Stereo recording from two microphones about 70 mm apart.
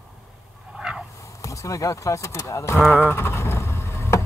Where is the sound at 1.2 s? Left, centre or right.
Left.